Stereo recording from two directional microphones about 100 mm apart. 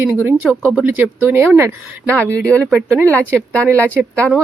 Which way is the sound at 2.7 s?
10° right (ahead or behind).